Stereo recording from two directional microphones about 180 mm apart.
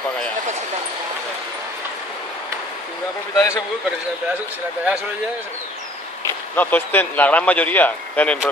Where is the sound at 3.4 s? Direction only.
15° left (ahead or behind).